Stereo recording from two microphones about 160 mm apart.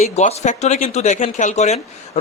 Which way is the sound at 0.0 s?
40° left (ahead or behind).